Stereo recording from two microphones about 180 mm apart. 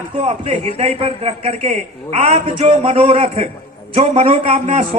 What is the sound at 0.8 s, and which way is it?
A man's voice, 35° right (ahead or behind).